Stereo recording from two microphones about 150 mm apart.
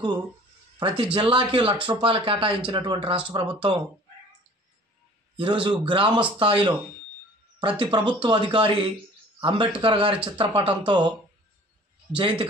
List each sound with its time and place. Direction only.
0.7 s speech: 35° right (ahead or behind)
5.4 s speech: 30° right (ahead or behind)
7.8 s speech: 30° right (ahead or behind)
12.2 s speech: 35° right (ahead or behind)